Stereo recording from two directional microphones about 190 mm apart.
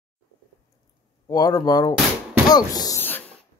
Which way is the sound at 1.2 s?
20° left (ahead or behind).